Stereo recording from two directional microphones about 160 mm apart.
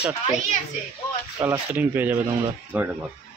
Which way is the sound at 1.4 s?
15° right (ahead or behind).